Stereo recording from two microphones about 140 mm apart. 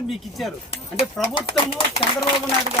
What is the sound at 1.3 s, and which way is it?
Speech, 40° left (ahead or behind).